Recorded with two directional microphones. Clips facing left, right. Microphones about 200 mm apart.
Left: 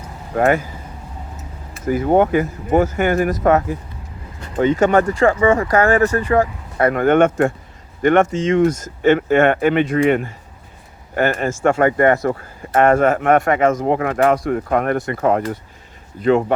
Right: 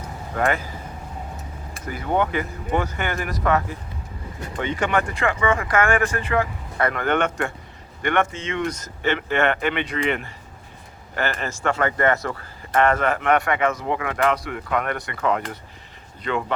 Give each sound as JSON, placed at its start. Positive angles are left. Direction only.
{"t": 1.8, "sound": "speech", "side_deg": 45}